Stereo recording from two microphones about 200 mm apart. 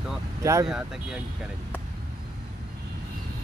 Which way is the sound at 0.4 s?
15° right (ahead or behind).